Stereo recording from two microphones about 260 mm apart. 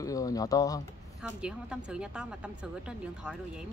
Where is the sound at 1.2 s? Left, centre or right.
Centre.